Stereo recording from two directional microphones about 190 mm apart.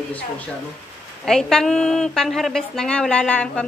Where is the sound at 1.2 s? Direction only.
Centre (ahead or behind).